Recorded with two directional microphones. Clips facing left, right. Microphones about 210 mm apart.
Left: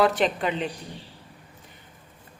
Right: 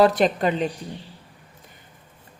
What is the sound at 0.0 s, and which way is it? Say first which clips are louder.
Speech: right 4 dB; 40° right (ahead or behind).